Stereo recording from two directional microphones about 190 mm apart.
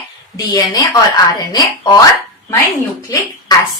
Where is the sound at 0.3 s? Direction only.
20° left (ahead or behind).